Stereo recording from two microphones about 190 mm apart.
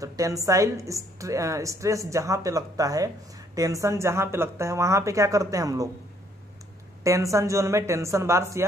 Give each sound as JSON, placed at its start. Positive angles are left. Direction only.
{"t": 0.0, "sound": "a woman's voice", "side_deg": -15}
{"t": 7.0, "sound": "a woman's voice", "side_deg": -15}